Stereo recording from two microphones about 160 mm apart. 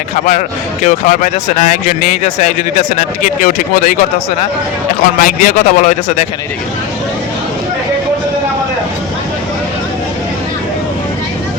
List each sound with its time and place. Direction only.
0.3 s a man's voice: 50° left (ahead or behind)
5.2 s speech: 55° left (ahead or behind)